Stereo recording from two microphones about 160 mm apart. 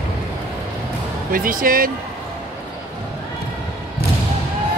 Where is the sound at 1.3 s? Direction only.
60° right (ahead or behind).